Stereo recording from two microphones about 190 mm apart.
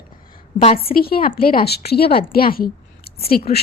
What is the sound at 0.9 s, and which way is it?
A woman's voice, 50° left (ahead or behind).